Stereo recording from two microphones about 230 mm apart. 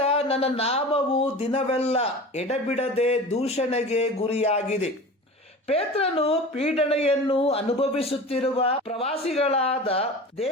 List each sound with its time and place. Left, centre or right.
0.0 s speech: left